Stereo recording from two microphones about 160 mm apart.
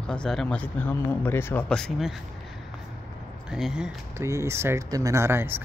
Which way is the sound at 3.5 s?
5° right (ahead or behind).